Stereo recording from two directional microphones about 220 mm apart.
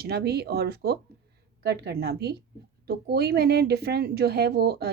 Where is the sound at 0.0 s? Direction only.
45° right (ahead or behind).